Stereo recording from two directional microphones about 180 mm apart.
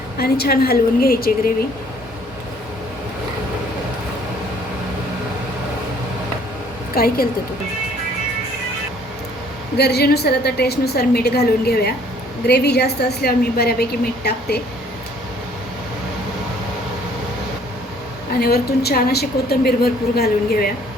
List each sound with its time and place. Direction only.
0.2 s a woman's voice: 55° left (ahead or behind)
6.9 s a woman's voice: 55° left (ahead or behind)
9.7 s a woman's voice: 65° left (ahead or behind)
18.3 s a woman's voice: 60° left (ahead or behind)